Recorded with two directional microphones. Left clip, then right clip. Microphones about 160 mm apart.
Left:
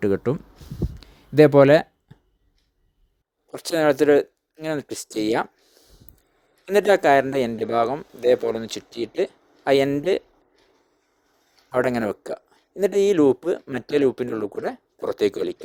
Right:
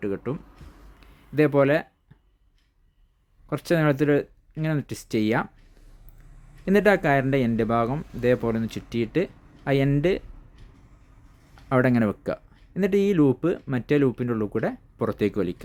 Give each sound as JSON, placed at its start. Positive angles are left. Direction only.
{"t": 0.0, "sound": "a sound", "side_deg": 35}
{"t": 3.5, "sound": "speech", "side_deg": 35}
{"t": 11.7, "sound": "speech", "side_deg": 35}